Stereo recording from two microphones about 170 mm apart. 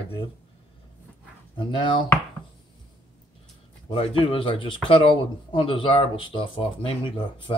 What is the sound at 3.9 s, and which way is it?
Speech, 30° left (ahead or behind).